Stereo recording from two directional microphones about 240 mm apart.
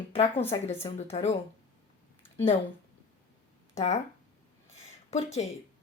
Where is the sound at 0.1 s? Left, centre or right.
Left.